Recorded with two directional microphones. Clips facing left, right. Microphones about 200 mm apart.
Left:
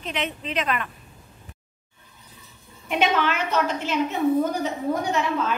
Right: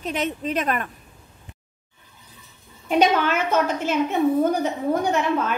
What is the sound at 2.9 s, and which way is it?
A woman's voice, 40° right (ahead or behind).